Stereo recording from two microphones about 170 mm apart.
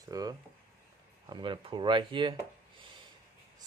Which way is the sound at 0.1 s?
20° right (ahead or behind).